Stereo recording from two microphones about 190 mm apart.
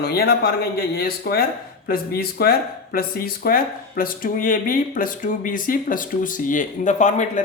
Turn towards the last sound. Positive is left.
turn(degrees=40)  # may be behind; listen again after turning